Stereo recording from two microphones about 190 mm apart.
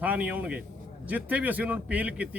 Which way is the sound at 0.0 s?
10° right (ahead or behind).